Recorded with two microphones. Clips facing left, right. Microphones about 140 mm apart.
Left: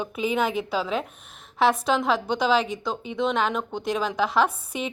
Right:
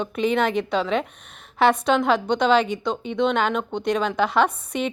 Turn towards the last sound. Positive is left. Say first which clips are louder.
# right 3 dB
turn(degrees=5)  # may be behind; listen again after turning